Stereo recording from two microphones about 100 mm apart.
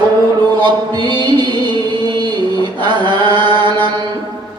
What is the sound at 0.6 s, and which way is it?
Chant, 50° right (ahead or behind).